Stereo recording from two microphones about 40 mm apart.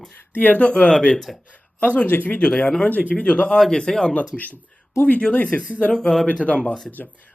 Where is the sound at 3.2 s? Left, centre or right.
Left.